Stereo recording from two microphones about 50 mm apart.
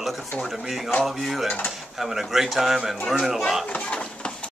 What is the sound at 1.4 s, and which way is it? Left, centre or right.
Speech, left.